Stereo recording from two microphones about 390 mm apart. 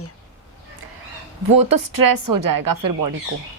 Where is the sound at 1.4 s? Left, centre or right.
Right.